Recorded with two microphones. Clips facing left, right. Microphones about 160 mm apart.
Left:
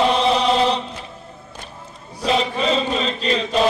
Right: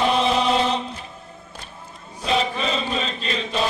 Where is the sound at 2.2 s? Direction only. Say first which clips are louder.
Left 3 dB; 35° left (ahead or behind).